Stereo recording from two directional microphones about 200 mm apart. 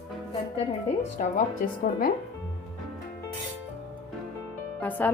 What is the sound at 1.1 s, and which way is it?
Speech, 45° left (ahead or behind).